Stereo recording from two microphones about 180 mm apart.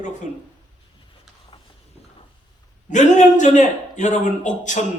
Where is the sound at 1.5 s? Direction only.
25° left (ahead or behind).